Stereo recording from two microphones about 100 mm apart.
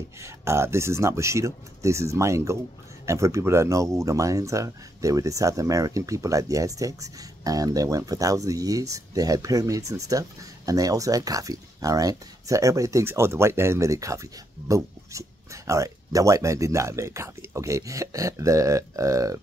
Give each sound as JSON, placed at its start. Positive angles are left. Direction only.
{"t": 0.2, "sound": "speech", "side_deg": -25}